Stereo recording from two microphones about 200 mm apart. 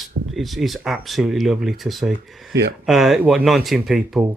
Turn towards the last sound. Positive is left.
turn(degrees=0)  # may be behind; listen again after turning